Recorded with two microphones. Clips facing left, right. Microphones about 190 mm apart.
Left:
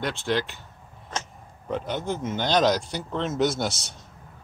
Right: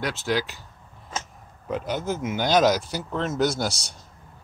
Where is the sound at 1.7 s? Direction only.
Centre (ahead or behind).